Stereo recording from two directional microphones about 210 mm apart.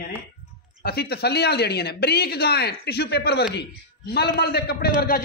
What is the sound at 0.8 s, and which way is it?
A man's voice, 50° left (ahead or behind).